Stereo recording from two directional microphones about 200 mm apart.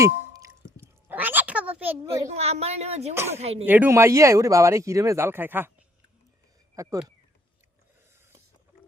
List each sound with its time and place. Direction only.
0.0 s a sound: 15° right (ahead or behind)
2.3 s speech: 30° right (ahead or behind)
3.7 s speech: 10° right (ahead or behind)
6.8 s speech: 15° right (ahead or behind)